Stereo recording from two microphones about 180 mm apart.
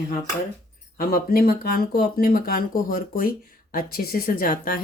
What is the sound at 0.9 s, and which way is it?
Speech, 55° left (ahead or behind).